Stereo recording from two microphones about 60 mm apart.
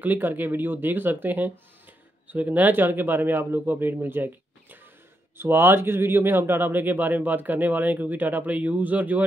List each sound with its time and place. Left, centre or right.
0.0 s speech: right